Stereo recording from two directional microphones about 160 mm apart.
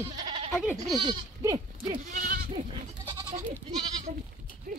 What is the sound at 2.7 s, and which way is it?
Goat, 25° right (ahead or behind).